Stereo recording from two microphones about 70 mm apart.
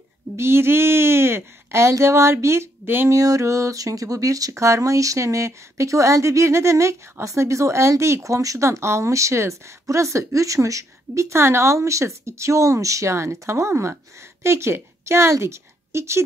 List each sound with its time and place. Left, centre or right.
0.4 s speech: right
3.1 s a woman's voice: right